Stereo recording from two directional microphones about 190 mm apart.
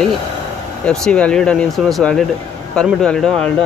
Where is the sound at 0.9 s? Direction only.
5° left (ahead or behind).